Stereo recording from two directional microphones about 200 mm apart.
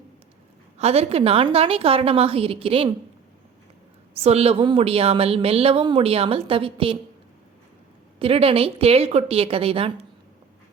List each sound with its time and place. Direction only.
0.8 s a woman's voice: 30° right (ahead or behind)
4.1 s a woman's voice: 30° right (ahead or behind)
8.2 s a woman's voice: 30° right (ahead or behind)